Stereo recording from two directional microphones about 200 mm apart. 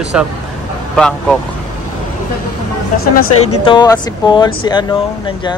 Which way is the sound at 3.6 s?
20° left (ahead or behind).